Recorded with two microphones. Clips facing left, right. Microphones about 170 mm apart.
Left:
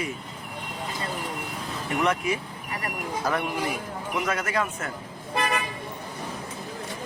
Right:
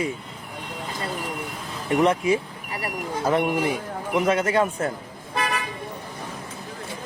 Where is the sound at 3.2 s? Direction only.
25° right (ahead or behind).